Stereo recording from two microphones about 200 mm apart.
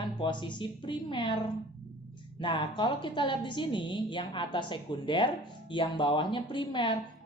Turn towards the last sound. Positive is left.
turn(degrees=25)  # may be behind; listen again after turning